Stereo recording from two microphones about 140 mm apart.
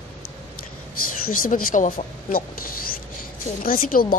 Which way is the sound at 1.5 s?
80° left.